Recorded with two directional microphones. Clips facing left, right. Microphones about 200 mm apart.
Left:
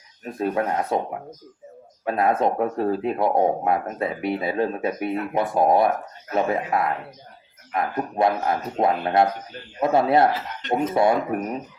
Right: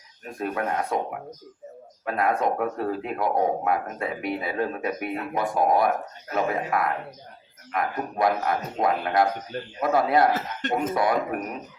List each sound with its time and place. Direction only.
0.3 s speech: 25° left (ahead or behind)
2.0 s speech: 25° left (ahead or behind)